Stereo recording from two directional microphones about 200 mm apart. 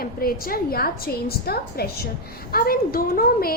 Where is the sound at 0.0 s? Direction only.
45° left (ahead or behind).